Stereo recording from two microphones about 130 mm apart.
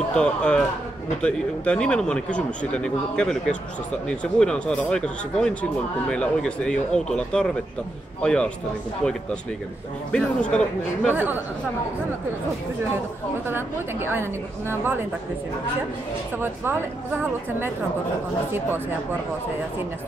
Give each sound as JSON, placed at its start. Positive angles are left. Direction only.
{"t": 0.1, "sound": "speech", "side_deg": 5}
{"t": 10.1, "sound": "speech", "side_deg": 5}
{"t": 13.5, "sound": "a woman's voice", "side_deg": -15}
{"t": 16.3, "sound": "a woman's voice", "side_deg": -15}